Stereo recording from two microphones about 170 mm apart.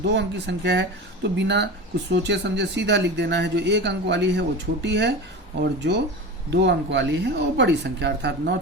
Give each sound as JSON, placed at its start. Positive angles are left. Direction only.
{"t": 0.0, "sound": "speech", "side_deg": -90}
{"t": 6.5, "sound": "speech", "side_deg": -90}